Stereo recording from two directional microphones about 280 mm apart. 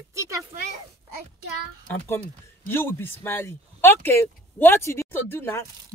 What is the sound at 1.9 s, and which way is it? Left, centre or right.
Speech, centre.